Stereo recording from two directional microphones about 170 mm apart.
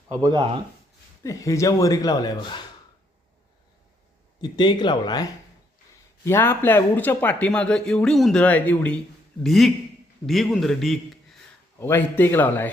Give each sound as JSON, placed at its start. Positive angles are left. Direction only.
{"t": 0.1, "sound": "speech", "side_deg": -25}
{"t": 1.2, "sound": "speech", "side_deg": 20}
{"t": 4.4, "sound": "speech", "side_deg": 25}
{"t": 6.2, "sound": "a man's voice", "side_deg": 15}
{"t": 11.8, "sound": "speech", "side_deg": 15}